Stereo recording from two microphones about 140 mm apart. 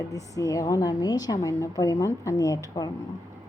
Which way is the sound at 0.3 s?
25° left (ahead or behind).